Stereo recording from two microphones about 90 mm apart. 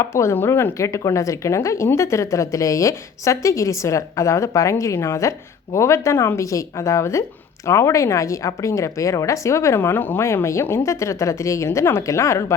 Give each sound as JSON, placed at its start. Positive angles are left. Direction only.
{"t": 0.0, "sound": "speech", "side_deg": 30}